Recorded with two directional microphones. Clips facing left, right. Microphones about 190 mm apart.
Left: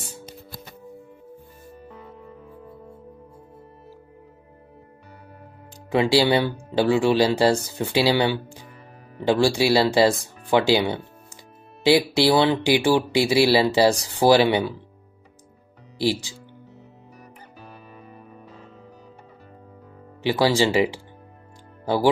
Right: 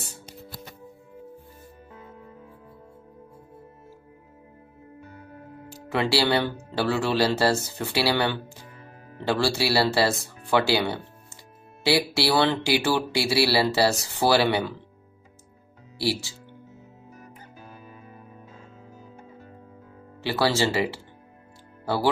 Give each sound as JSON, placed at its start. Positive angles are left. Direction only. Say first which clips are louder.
{"t": 5.9, "sound": "speech", "louder": "left 5 dB", "side_deg": 15}
{"t": 16.0, "sound": "speech", "louder": "left 4 dB", "side_deg": 15}
{"t": 20.2, "sound": "speech", "louder": "left 4 dB", "side_deg": 15}